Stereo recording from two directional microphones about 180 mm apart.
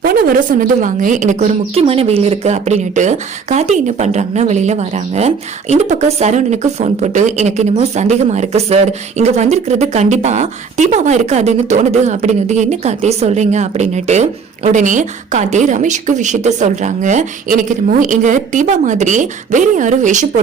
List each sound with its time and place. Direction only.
0.0 s a woman's voice: 55° right (ahead or behind)